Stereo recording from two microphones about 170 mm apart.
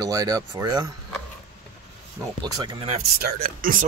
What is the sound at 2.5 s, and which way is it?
Speech, 25° right (ahead or behind).